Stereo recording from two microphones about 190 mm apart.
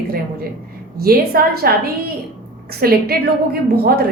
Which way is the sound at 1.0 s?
55° right (ahead or behind).